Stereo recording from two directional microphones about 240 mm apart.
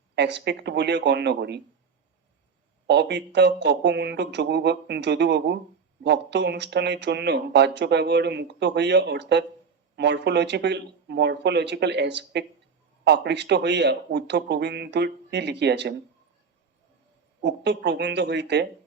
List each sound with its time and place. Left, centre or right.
0.2 s speech: right
2.8 s speech: right
17.4 s speech: right